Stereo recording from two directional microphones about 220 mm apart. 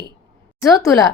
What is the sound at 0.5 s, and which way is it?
Speech, 15° left (ahead or behind).